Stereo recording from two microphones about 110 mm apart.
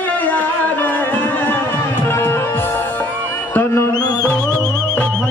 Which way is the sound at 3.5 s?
20° left (ahead or behind).